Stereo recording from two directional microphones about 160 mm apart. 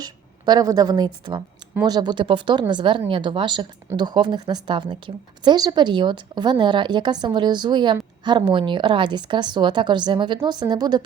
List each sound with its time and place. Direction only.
0.0 s a woman's voice: 25° right (ahead or behind)